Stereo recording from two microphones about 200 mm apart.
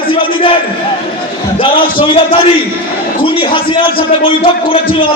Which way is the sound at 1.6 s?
25° left (ahead or behind).